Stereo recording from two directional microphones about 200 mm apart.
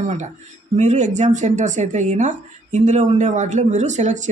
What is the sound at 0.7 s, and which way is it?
Speech, 35° right (ahead or behind).